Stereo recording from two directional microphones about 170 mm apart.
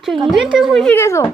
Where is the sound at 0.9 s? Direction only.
15° left (ahead or behind).